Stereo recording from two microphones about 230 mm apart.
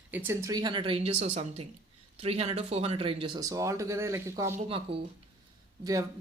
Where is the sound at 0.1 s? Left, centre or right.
Centre.